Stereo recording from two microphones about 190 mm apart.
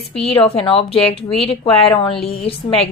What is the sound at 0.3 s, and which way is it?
A woman's voice, 30° left (ahead or behind).